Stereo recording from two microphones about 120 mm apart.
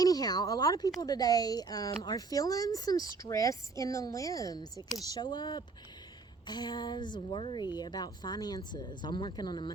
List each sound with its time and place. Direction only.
0.0 s speech: 30° left (ahead or behind)